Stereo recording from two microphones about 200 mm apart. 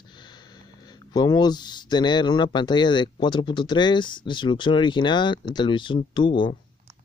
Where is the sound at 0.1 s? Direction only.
20° left (ahead or behind).